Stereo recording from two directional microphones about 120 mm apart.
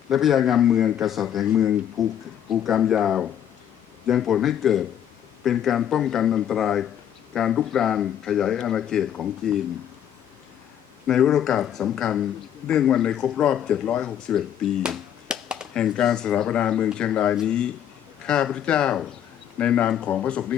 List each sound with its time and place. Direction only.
0.1 s speech: centre (ahead or behind)
11.0 s speech: 5° left (ahead or behind)
14.8 s music: 5° right (ahead or behind)
15.7 s speech: 5° left (ahead or behind)